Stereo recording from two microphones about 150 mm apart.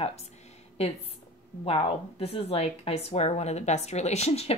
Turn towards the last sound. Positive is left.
turn(degrees=45)  # may be behind; listen again after turning